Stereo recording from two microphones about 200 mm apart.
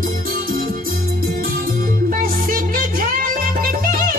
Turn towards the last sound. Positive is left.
turn(degrees=-45)  # may be behind; listen again after turning